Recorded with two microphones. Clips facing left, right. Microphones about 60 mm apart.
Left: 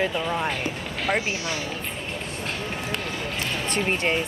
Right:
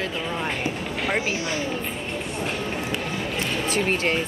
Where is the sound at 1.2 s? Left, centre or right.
Right.